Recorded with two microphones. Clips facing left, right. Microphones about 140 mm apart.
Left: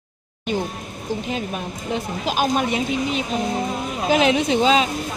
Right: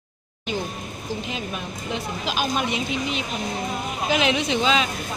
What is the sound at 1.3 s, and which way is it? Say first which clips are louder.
Speech: left 4 dB; 45° left (ahead or behind).